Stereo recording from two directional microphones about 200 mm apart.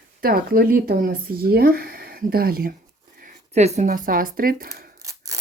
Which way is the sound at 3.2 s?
35° right (ahead or behind).